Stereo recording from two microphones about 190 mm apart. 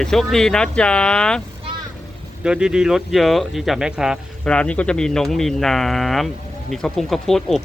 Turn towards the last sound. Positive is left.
turn(degrees=0)  # may be behind; listen again after turning